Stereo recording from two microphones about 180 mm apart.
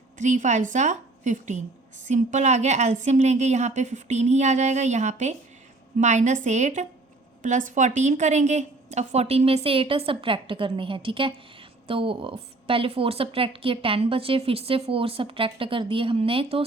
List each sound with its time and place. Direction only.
0.2 s a woman's voice: 45° right (ahead or behind)